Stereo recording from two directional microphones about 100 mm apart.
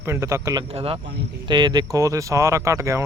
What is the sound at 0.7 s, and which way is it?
Speech, 75° right (ahead or behind).